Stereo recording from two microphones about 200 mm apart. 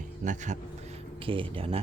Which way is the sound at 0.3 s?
35° right (ahead or behind).